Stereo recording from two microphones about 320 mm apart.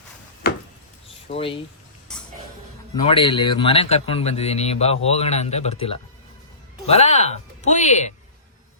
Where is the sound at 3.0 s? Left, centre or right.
Centre.